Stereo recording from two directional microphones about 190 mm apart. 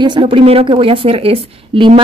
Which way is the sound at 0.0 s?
25° right (ahead or behind).